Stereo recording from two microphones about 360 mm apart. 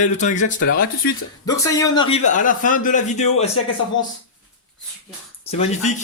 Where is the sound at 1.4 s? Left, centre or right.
Centre.